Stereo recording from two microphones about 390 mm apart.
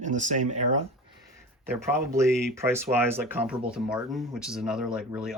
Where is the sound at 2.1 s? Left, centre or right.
Centre.